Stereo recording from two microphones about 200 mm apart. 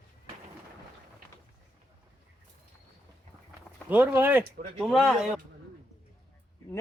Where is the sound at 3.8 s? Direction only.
10° right (ahead or behind).